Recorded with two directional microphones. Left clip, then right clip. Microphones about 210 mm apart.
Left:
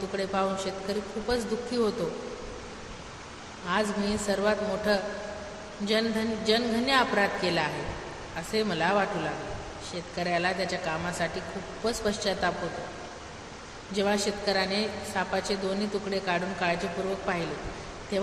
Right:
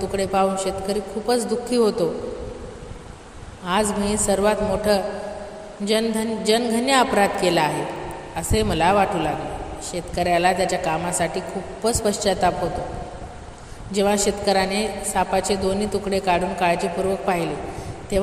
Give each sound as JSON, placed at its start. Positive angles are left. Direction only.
{"t": 0.1, "sound": "a woman's voice", "side_deg": -30}
{"t": 3.6, "sound": "a woman's voice", "side_deg": -30}
{"t": 13.9, "sound": "a woman's voice", "side_deg": -30}